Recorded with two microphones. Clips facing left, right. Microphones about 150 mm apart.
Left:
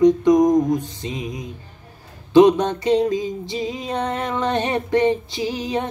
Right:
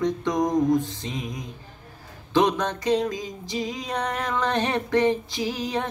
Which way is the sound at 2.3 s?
20° left (ahead or behind).